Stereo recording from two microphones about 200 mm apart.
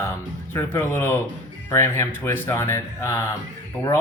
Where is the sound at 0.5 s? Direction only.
10° left (ahead or behind).